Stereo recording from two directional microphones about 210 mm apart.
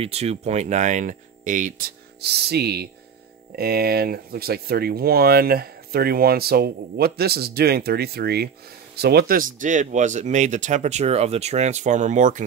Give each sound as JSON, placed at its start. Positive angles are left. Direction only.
{"t": 0.0, "sound": "speech", "side_deg": -30}